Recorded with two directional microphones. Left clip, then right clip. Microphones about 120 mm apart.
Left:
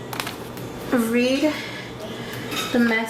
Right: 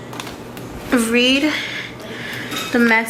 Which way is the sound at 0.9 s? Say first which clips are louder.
Right 5 dB; 45° right (ahead or behind).